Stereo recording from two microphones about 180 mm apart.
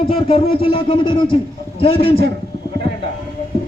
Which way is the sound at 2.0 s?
60° right (ahead or behind).